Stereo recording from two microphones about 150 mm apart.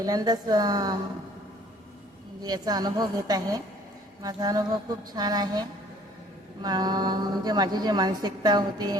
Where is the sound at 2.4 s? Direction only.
25° right (ahead or behind).